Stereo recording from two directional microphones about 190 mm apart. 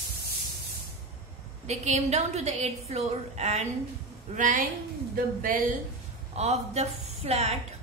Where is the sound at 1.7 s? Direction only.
35° right (ahead or behind).